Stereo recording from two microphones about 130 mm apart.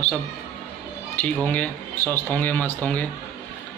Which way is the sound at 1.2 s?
10° left (ahead or behind).